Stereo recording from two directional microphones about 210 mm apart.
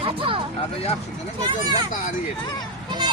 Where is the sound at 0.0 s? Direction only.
25° right (ahead or behind).